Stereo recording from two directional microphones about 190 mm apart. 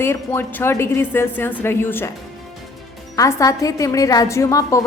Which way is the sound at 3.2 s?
15° left (ahead or behind).